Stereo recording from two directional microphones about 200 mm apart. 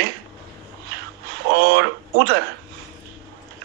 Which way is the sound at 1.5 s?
55° right (ahead or behind).